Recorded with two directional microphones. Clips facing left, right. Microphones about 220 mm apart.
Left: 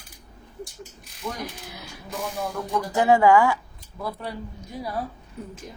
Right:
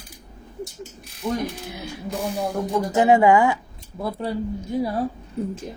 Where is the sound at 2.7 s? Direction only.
20° right (ahead or behind).